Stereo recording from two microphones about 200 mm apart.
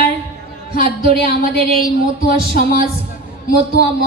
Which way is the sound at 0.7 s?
45° left (ahead or behind).